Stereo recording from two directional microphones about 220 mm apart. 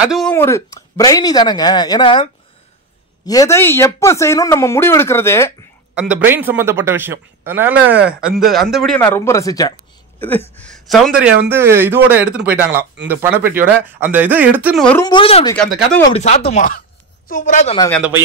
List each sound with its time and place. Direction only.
0.0 s speech: centre (ahead or behind)
0.3 s speech: 10° left (ahead or behind)
3.3 s speech: 15° left (ahead or behind)
5.9 s a man's voice: 5° right (ahead or behind)
11.1 s a man's voice: 10° right (ahead or behind)
15.0 s speech: 25° left (ahead or behind)
15.5 s speech: 5° left (ahead or behind)
16.1 s speech: 30° left (ahead or behind)